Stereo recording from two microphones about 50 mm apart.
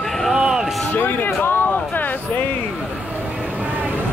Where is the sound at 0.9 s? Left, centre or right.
Left.